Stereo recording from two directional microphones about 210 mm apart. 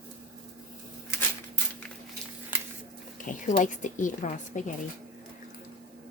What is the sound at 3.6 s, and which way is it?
A woman's voice, 40° left (ahead or behind).